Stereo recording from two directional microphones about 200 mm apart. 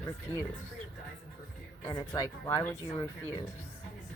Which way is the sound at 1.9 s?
20° left (ahead or behind).